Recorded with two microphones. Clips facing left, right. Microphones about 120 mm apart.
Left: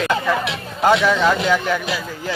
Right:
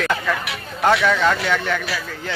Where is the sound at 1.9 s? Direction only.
20° left (ahead or behind).